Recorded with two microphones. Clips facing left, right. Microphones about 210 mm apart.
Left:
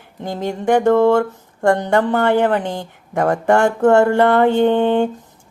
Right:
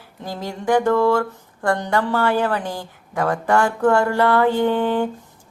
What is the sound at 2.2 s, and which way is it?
Speech, 60° left (ahead or behind).